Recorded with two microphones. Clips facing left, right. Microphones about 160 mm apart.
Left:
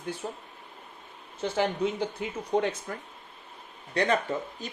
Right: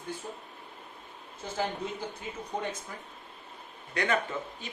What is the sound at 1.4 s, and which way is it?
A man's voice, 80° left.